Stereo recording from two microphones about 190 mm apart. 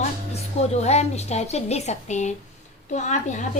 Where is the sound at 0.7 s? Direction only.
35° left (ahead or behind).